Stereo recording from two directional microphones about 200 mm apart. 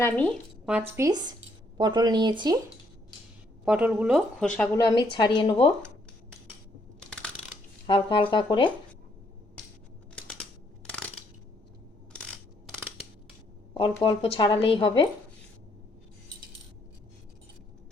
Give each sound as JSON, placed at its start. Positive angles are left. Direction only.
{"t": 0.0, "sound": "speech", "side_deg": 5}
{"t": 0.9, "sound": "speech", "side_deg": -20}
{"t": 3.7, "sound": "speech", "side_deg": -5}
{"t": 4.9, "sound": "speech", "side_deg": 20}
{"t": 7.9, "sound": "speech", "side_deg": 25}
{"t": 10.2, "sound": "typing", "side_deg": 5}
{"t": 10.8, "sound": "crushing", "side_deg": 5}
{"t": 12.1, "sound": "coin", "side_deg": 5}
{"t": 14.0, "sound": "speech", "side_deg": 25}